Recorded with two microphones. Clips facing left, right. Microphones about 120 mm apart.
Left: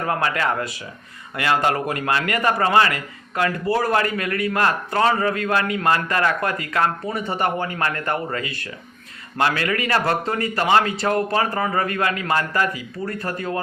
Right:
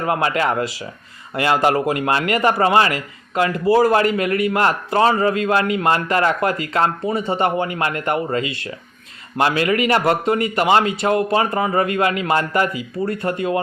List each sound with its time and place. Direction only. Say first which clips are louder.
0.0 s a man's voice: right 3 dB; 20° right (ahead or behind)